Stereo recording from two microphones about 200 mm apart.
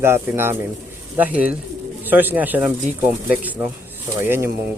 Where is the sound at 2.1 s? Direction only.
10° right (ahead or behind).